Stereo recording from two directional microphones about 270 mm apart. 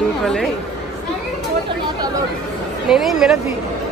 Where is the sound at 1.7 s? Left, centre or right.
Centre.